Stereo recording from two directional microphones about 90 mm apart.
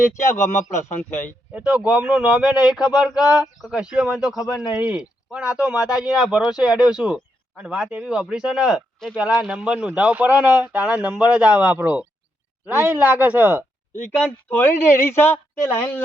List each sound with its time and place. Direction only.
0.1 s speech: 30° left (ahead or behind)
1.5 s speech: 15° right (ahead or behind)
13.1 s speech: 20° right (ahead or behind)
14.5 s speech: 25° left (ahead or behind)